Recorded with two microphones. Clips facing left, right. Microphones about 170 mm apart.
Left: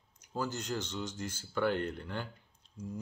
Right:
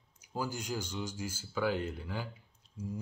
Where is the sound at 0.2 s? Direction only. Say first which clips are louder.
Left 1 dB; 10° right (ahead or behind).